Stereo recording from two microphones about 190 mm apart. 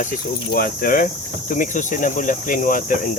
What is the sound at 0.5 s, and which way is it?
Speech, 50° left (ahead or behind).